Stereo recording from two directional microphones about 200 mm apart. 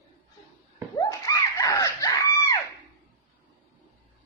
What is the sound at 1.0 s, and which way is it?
Screaming, 20° left (ahead or behind).